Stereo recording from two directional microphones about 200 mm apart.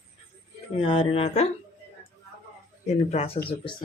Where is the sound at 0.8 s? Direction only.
30° left (ahead or behind).